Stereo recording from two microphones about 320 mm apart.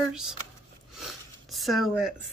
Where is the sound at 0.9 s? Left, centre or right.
Centre.